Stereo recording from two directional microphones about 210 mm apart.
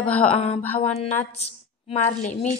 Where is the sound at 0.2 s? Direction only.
25° left (ahead or behind).